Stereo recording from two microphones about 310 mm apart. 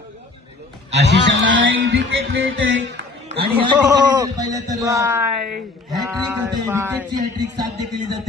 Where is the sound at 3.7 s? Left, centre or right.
Centre.